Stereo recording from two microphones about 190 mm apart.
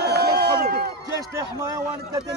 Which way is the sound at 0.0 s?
55° right (ahead or behind).